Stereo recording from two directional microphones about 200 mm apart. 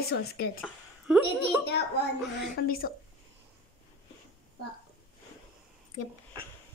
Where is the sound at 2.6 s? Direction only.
55° left (ahead or behind).